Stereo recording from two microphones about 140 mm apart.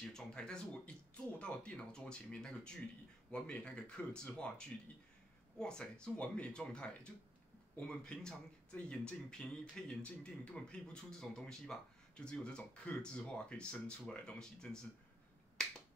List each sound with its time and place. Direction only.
0.0 s speech: 5° left (ahead or behind)